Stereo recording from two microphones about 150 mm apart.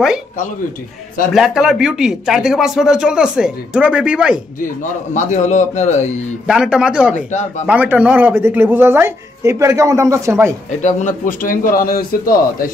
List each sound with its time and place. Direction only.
1.3 s speech: centre (ahead or behind)
4.6 s a man's voice: 60° left (ahead or behind)
6.4 s speech: 5° right (ahead or behind)
7.2 s a man's voice: 50° left (ahead or behind)
7.6 s speech: 10° right (ahead or behind)
10.8 s speech: 55° left (ahead or behind); by 12.4 s 75° left (ahead or behind)